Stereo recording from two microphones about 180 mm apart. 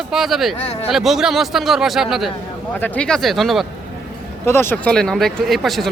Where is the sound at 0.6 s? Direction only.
35° left (ahead or behind).